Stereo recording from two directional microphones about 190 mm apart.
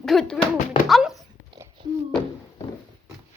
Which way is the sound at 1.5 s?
25° right (ahead or behind).